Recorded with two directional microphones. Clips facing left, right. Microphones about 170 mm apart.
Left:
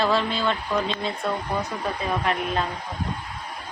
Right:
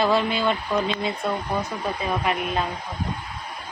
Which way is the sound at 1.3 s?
Centre (ahead or behind).